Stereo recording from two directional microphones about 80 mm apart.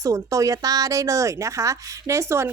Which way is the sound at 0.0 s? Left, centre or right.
Right.